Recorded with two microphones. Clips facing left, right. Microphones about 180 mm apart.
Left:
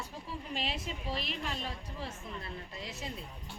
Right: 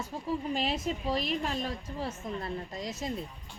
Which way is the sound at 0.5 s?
40° right (ahead or behind).